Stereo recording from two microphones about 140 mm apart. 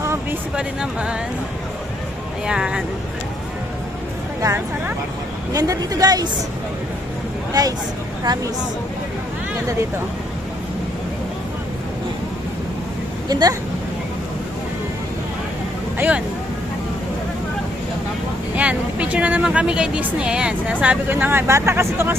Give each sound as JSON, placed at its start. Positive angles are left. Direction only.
{"t": 0.0, "sound": "a sound", "side_deg": -20}
{"t": 0.5, "sound": "speech", "side_deg": -5}
{"t": 2.5, "sound": "speech", "side_deg": -5}
{"t": 4.4, "sound": "a woman's voice", "side_deg": -15}
{"t": 7.6, "sound": "a woman's voice", "side_deg": -25}
{"t": 13.2, "sound": "a woman's voice", "side_deg": -25}
{"t": 16.0, "sound": "speech", "side_deg": -10}
{"t": 18.5, "sound": "speech", "side_deg": -10}